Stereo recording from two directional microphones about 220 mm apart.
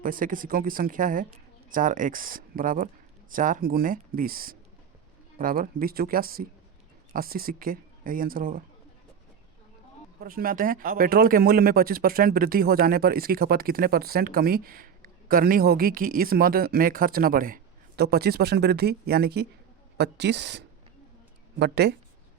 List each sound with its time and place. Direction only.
0.0 s speech: 40° right (ahead or behind)
10.2 s speech: 40° right (ahead or behind)